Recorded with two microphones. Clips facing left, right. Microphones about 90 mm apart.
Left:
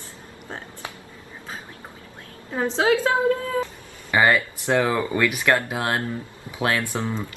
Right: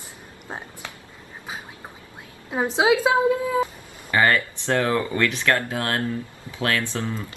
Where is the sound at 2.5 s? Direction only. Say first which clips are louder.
Right 1 dB; 10° right (ahead or behind).